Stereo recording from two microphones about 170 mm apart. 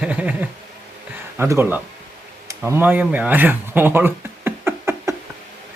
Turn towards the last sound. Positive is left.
turn(degrees=-15)  # may be behind; listen again after turning